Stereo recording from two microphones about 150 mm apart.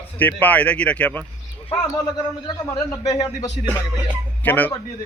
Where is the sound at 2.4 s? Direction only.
30° left (ahead or behind).